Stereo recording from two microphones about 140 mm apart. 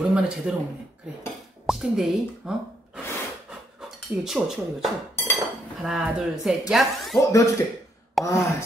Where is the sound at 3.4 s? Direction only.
5° right (ahead or behind).